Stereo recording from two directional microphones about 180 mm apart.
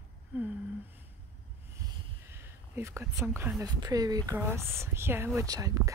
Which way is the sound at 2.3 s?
15° right (ahead or behind).